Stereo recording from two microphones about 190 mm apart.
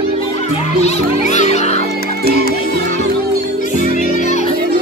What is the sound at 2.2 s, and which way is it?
Music, 55° right (ahead or behind).